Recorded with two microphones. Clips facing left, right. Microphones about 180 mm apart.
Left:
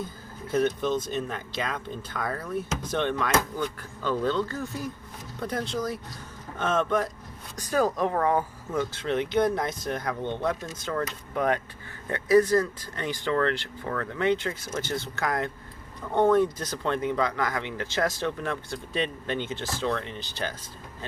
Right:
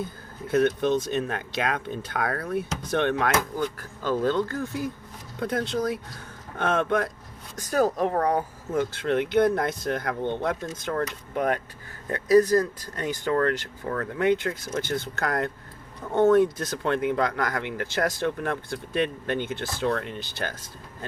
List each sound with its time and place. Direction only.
0.4 s speech: 60° right (ahead or behind)
3.8 s speech: 45° right (ahead or behind)
5.4 s speech: 65° right (ahead or behind)
7.5 s speech: 40° right (ahead or behind)